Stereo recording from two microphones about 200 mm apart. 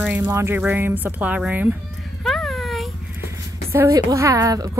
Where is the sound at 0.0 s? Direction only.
5° right (ahead or behind).